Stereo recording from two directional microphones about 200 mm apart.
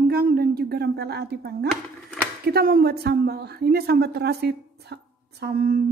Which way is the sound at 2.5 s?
50° right (ahead or behind).